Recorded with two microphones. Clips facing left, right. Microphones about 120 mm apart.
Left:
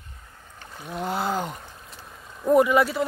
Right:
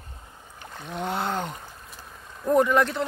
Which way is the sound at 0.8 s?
Centre (ahead or behind).